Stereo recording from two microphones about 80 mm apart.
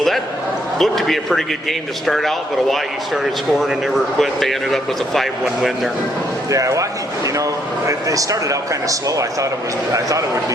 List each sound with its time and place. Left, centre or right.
0.8 s speech: centre
4.2 s speech: centre
6.5 s a man's voice: right